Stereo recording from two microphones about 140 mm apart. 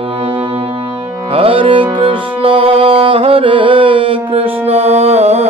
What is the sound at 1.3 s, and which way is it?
Music, 40° right (ahead or behind).